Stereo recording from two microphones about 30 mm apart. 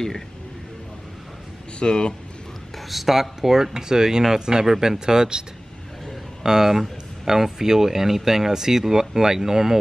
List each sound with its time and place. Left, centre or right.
1.8 s speech: left
2.9 s speech: centre; by 5.4 s right
6.4 s speech: centre